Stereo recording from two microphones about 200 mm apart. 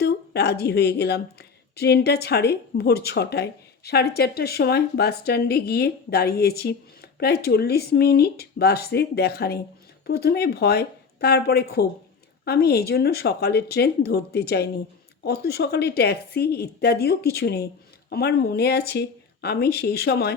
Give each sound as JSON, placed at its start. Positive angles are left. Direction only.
{"t": 0.0, "sound": "a woman's voice", "side_deg": 55}